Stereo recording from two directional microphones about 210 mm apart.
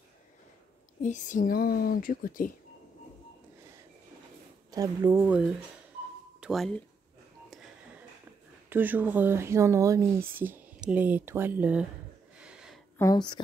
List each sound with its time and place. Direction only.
1.0 s a woman's voice: 35° left (ahead or behind)
4.6 s speech: 15° right (ahead or behind); by 6.7 s centre (ahead or behind)
8.6 s speech: 10° right (ahead or behind)
12.4 s a sound: 5° right (ahead or behind)
12.9 s speech: 15° left (ahead or behind)